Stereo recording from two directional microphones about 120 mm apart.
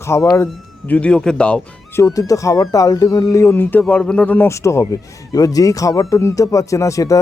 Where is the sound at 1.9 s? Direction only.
25° left (ahead or behind).